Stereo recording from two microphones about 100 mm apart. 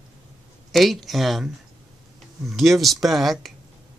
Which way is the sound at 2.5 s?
Centre (ahead or behind).